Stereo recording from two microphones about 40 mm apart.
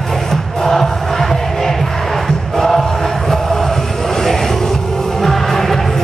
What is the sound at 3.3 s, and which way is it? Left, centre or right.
Chant, centre.